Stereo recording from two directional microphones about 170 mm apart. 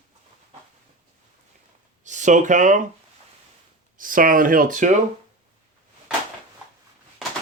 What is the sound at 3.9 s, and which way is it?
Speech, 55° right (ahead or behind).